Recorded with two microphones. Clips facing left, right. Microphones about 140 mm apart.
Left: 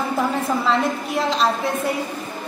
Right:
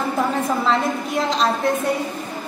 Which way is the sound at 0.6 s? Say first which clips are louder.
Even; centre (ahead or behind).